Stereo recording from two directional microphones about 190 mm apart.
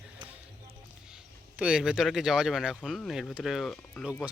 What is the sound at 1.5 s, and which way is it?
Speech, 5° right (ahead or behind).